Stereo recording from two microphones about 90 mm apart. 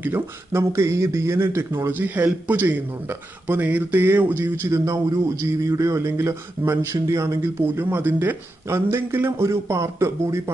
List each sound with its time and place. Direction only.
0.0 s speech: 25° right (ahead or behind)
4.6 s speech: 35° right (ahead or behind)
7.6 s speech: 25° right (ahead or behind)